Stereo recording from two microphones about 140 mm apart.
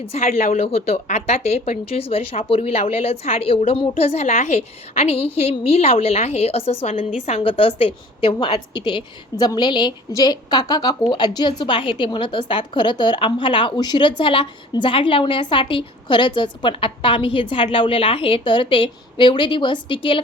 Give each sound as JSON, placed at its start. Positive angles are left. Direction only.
{"t": 0.0, "sound": "a woman's voice", "side_deg": 50}